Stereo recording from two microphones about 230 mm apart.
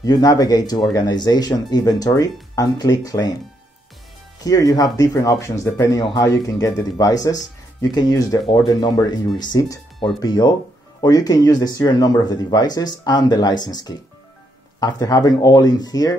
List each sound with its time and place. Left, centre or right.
0.0 s speech: centre
4.4 s speech: centre